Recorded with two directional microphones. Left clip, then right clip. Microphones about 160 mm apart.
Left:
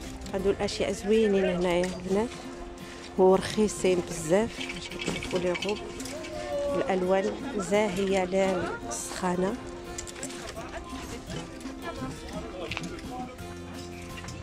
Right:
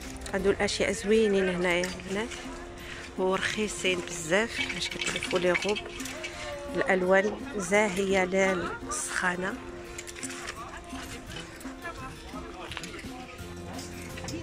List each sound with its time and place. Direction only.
0.3 s speech: 10° left (ahead or behind)
3.3 s speech: 35° left (ahead or behind)
4.7 s speech: 5° left (ahead or behind)
6.8 s speech: 5° left (ahead or behind)
8.9 s a woman's voice: 25° left (ahead or behind)